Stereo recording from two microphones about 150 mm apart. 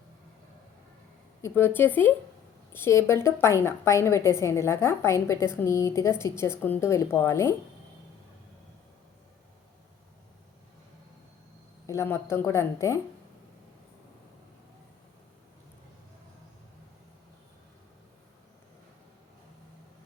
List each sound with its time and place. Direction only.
1.4 s a woman's voice: 15° left (ahead or behind)
11.9 s a woman's voice: 15° left (ahead or behind)